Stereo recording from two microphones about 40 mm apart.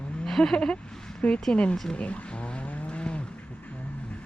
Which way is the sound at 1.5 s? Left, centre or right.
Left.